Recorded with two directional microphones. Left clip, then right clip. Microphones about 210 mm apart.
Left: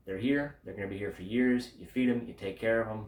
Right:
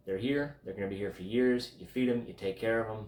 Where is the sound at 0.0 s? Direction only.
5° left (ahead or behind).